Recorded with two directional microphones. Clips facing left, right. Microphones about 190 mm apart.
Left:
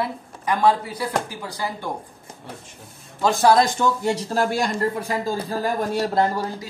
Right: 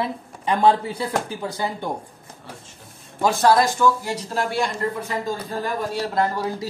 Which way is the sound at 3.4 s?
20° left (ahead or behind).